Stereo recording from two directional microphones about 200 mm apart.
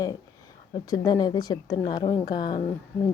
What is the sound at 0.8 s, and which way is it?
A woman's voice, 20° left (ahead or behind).